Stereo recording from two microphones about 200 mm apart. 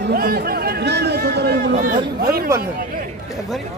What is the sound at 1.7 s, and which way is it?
Speech, 45° right (ahead or behind).